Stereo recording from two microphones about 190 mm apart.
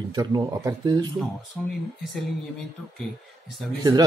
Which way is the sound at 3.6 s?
Centre (ahead or behind).